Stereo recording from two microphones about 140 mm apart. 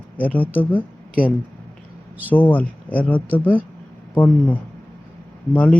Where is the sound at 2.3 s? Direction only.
10° left (ahead or behind).